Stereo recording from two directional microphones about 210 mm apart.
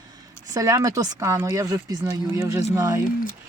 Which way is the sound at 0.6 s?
15° right (ahead or behind).